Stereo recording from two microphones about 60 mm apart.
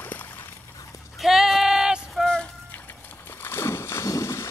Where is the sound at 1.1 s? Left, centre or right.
Centre.